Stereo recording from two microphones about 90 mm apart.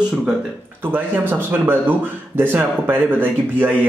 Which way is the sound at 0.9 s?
20° right (ahead or behind).